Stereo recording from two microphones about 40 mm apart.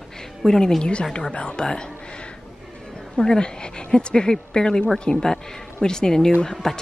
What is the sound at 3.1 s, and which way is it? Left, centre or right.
Speech, left.